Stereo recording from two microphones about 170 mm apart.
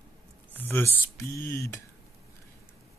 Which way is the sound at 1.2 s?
15° left (ahead or behind).